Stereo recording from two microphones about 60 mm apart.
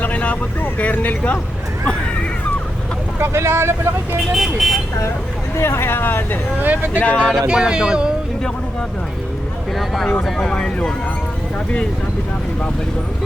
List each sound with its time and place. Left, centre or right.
0.0 s speech: left
3.2 s speech: right
4.4 s speech: centre
5.5 s speech: left
6.6 s speech: right
7.0 s speech: left
7.4 s speech: centre
9.7 s speech: centre